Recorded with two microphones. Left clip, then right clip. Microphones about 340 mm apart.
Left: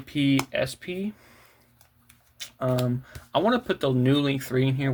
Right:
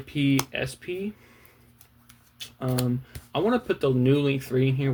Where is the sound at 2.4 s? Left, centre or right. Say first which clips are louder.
Left 4 dB; left.